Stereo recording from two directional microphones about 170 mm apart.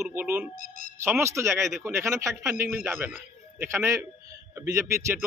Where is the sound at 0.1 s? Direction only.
10° right (ahead or behind).